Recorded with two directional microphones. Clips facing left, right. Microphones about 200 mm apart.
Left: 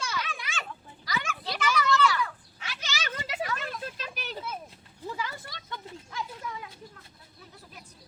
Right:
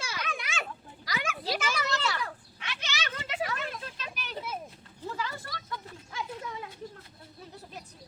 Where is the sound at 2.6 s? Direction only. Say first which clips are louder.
Left 2 dB; 40° left (ahead or behind).